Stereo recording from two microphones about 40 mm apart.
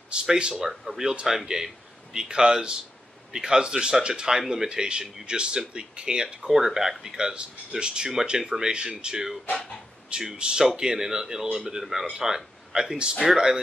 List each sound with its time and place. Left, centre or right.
0.1 s speech: right
10.3 s speech: right
10.6 s speech: centre
13.1 s speech: centre